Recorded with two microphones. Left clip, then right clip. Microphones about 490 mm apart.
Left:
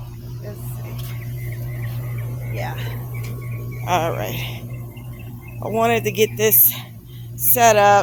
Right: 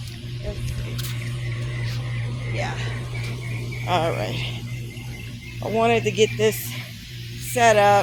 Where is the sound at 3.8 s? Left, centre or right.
Left.